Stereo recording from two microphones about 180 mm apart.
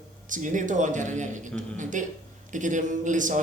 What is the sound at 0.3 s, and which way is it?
A man's voice, 45° right (ahead or behind).